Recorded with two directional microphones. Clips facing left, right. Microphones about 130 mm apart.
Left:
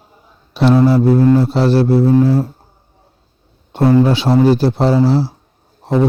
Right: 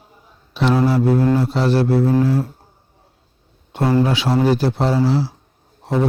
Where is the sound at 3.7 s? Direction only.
30° left (ahead or behind).